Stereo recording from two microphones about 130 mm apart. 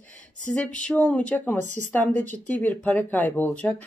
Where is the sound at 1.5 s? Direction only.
65° right (ahead or behind).